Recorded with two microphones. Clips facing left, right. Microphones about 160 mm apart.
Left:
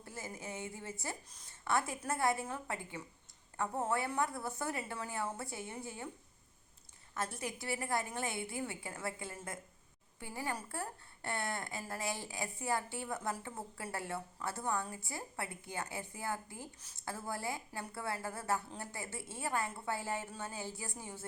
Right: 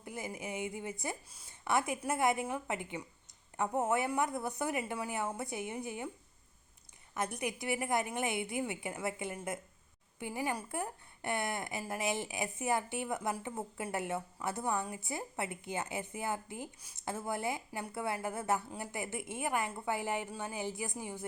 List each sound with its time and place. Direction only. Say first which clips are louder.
0.0 s a woman's voice: right 4 dB; 15° right (ahead or behind)
7.1 s a woman's voice: right 4 dB; 15° right (ahead or behind)